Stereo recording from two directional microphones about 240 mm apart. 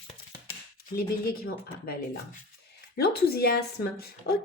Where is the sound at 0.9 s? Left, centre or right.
Left.